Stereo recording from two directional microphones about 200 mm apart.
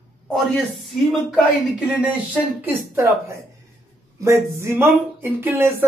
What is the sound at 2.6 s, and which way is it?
Speech, 10° right (ahead or behind).